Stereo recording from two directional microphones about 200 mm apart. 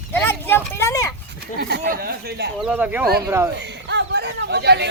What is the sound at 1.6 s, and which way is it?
Speech, 50° right (ahead or behind).